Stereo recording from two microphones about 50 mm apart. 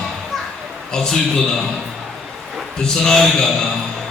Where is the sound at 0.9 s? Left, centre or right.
Centre.